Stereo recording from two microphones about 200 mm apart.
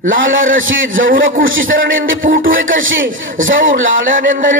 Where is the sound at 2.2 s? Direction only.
45° right (ahead or behind).